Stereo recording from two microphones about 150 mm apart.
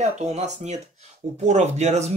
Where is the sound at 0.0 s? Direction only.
45° right (ahead or behind).